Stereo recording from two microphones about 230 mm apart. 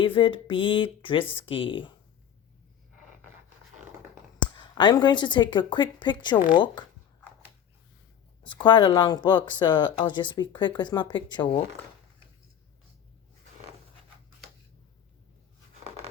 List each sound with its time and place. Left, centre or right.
0.0 s speech: left
4.5 s speech: centre
8.4 s speech: centre